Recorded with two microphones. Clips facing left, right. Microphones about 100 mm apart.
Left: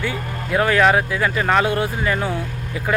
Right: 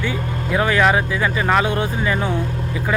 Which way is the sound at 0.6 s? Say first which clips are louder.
Left 1 dB; 5° right (ahead or behind).